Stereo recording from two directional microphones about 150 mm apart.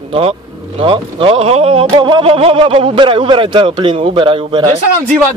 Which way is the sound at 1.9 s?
30° right (ahead or behind).